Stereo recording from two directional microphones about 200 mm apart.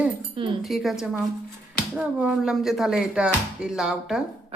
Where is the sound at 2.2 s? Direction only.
5° right (ahead or behind).